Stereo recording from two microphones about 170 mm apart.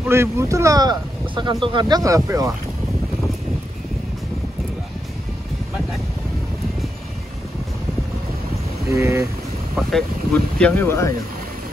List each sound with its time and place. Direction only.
0.0 s speech: 15° right (ahead or behind)
8.9 s speech: 15° right (ahead or behind)
9.8 s speech: centre (ahead or behind)